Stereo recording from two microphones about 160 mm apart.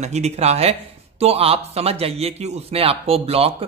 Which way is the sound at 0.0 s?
45° right (ahead or behind).